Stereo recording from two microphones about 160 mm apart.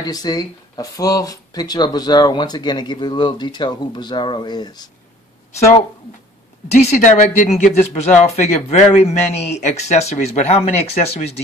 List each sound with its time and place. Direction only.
0.0 s speech: 25° left (ahead or behind)
6.8 s speech: 50° left (ahead or behind)